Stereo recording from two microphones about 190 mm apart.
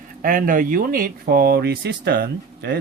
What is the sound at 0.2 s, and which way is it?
Speech, 45° right (ahead or behind).